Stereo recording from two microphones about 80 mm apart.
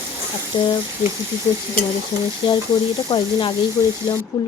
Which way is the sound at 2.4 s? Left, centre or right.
Left.